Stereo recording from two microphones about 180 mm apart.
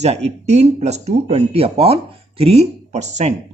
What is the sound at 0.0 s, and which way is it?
Speech, 35° right (ahead or behind).